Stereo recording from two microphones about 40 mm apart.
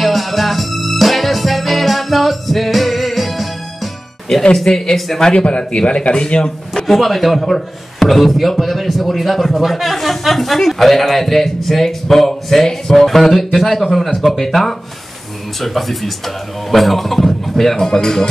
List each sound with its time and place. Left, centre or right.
0.0 s music: centre
4.7 s a man's voice: centre
5.3 s a man's voice: left
6.9 s a man's voice: centre